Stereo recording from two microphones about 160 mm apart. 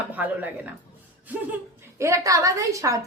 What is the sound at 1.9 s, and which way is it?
A woman's voice, 20° right (ahead or behind).